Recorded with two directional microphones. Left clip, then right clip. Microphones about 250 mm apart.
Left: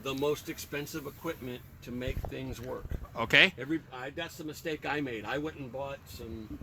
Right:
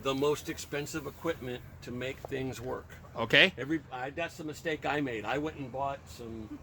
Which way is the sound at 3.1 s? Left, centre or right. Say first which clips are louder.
Left 1 dB; centre.